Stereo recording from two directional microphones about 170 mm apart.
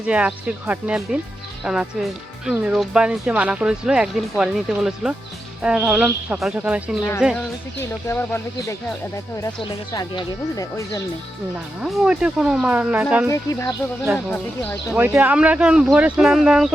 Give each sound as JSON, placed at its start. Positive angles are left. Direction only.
{"t": 0.0, "sound": "speech", "side_deg": -5}
{"t": 7.3, "sound": "speech", "side_deg": 15}
{"t": 9.6, "sound": "speech", "side_deg": 25}
{"t": 11.8, "sound": "speech", "side_deg": -5}
{"t": 13.2, "sound": "speech", "side_deg": 20}
{"t": 14.3, "sound": "speech", "side_deg": 10}
{"t": 14.9, "sound": "speech", "side_deg": -10}